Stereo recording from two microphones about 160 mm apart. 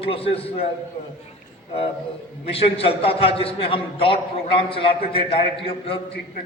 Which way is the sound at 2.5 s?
35° left (ahead or behind).